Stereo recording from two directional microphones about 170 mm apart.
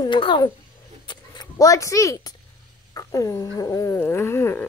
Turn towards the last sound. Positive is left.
turn(degrees=15)  # may be behind; listen again after turning